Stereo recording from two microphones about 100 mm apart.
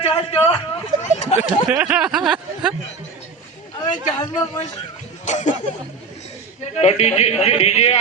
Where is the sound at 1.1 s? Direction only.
90° left.